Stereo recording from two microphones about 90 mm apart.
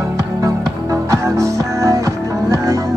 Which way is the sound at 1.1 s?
35° right (ahead or behind).